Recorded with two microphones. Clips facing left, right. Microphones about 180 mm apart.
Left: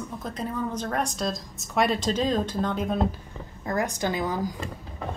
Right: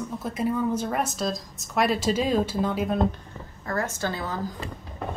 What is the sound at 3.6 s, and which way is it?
Speech, 15° left (ahead or behind).